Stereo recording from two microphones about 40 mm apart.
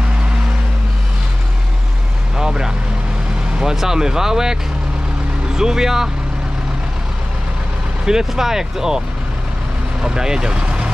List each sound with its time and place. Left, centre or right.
2.3 s vehicle: centre
3.7 s speech: centre
5.6 s speech: centre
8.0 s speech: centre
10.0 s speech: centre